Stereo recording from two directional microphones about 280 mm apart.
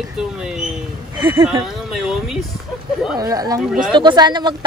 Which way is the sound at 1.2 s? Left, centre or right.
Centre.